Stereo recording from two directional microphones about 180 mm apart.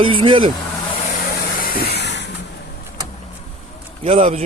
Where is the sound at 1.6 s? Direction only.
65° left (ahead or behind).